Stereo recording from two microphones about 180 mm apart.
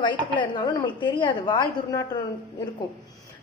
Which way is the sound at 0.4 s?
25° left (ahead or behind).